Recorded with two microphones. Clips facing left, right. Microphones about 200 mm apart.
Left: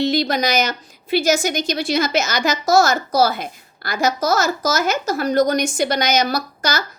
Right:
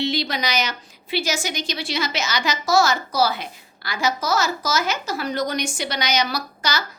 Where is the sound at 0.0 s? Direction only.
45° left (ahead or behind).